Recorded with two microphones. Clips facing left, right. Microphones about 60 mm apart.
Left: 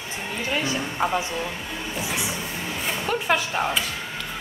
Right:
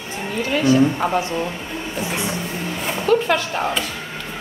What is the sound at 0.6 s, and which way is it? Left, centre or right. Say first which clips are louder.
Speech: right 13 dB; right.